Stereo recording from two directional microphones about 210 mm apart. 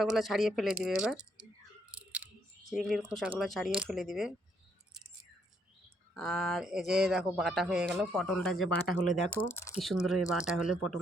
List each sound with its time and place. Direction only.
0.0 s speech: centre (ahead or behind)
1.9 s a sound: 5° right (ahead or behind)
3.8 s speech: centre (ahead or behind)
6.1 s speech: centre (ahead or behind)
9.8 s speech: centre (ahead or behind)